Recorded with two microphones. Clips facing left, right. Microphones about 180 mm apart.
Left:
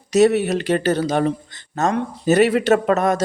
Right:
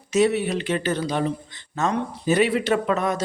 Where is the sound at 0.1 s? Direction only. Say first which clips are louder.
Left 5 dB; 45° left (ahead or behind).